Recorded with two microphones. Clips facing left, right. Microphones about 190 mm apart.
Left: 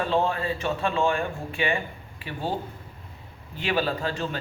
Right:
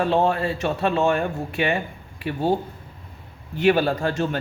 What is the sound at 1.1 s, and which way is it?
Speech, 45° right (ahead or behind).